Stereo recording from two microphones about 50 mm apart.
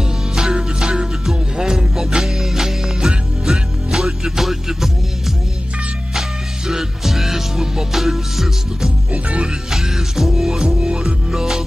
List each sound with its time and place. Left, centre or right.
0.4 s music: centre
6.7 s music: centre
9.1 s music: right
9.7 s music: centre